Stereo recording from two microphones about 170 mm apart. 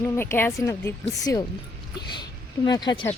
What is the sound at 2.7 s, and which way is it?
Speech, 25° left (ahead or behind).